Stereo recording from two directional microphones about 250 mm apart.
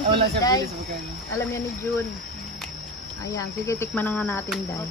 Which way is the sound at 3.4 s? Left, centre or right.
Centre.